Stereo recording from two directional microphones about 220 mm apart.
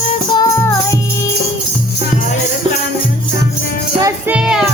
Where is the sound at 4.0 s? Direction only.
5° right (ahead or behind).